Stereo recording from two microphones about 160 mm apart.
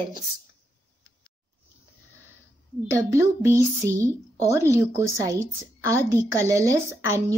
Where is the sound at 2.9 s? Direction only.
15° right (ahead or behind).